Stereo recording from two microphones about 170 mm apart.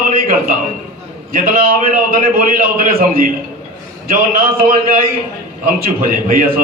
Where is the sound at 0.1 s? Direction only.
55° right (ahead or behind).